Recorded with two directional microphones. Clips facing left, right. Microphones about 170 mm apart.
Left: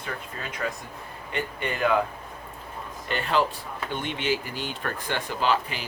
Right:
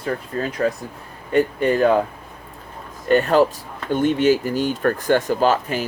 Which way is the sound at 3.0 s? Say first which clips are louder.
Right 10 dB; 45° right (ahead or behind).